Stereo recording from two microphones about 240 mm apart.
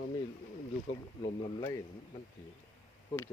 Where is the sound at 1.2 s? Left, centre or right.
Left.